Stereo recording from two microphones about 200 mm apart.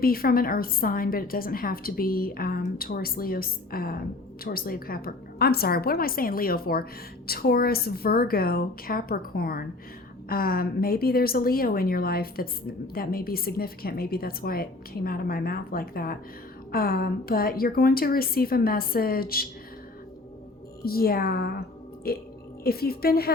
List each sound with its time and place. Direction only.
0.0 s a woman's voice: 50° left (ahead or behind)
20.8 s a woman's voice: 50° left (ahead or behind)